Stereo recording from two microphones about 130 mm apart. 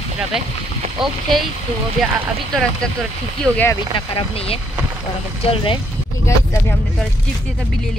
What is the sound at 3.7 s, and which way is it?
Speech, 40° left (ahead or behind).